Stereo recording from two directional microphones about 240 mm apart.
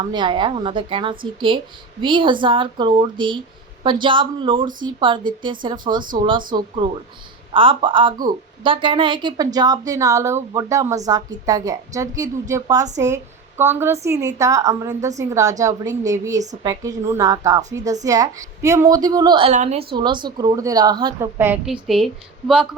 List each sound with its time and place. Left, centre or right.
0.0 s a woman's voice: centre